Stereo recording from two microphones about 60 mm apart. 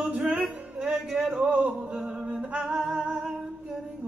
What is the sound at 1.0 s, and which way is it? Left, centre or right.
Speech, centre.